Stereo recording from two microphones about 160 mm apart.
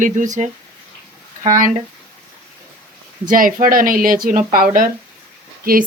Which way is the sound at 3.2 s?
60° right (ahead or behind).